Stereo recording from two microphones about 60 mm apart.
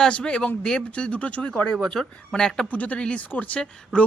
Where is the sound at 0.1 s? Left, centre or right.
Left.